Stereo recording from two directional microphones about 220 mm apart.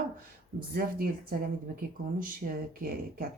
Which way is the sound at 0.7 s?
40° right (ahead or behind).